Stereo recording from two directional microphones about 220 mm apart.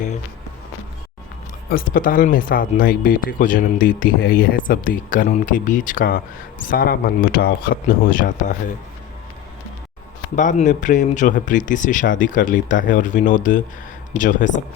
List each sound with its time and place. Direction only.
1.7 s speech: 40° left (ahead or behind)
10.3 s speech: 35° left (ahead or behind)